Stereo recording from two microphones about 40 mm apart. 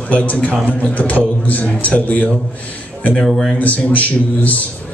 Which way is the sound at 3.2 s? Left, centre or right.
Centre.